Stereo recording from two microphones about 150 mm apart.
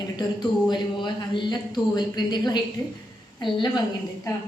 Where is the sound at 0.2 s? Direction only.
30° left (ahead or behind).